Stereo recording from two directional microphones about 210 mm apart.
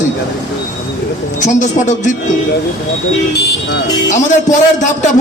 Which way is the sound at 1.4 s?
35° left (ahead or behind).